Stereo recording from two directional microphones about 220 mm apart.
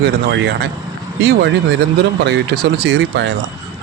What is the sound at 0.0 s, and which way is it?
Speech, 45° right (ahead or behind).